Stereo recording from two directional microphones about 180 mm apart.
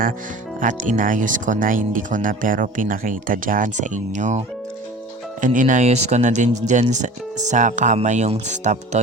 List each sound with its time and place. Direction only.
0.6 s speech: 45° right (ahead or behind)